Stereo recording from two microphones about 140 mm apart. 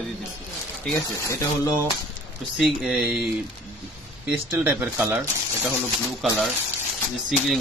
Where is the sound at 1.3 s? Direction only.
20° left (ahead or behind).